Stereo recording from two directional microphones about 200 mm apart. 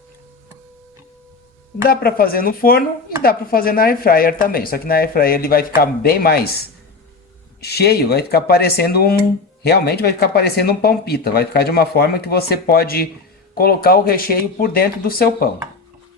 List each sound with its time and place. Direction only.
1.8 s speech: 50° left (ahead or behind)
7.6 s speech: 55° left (ahead or behind)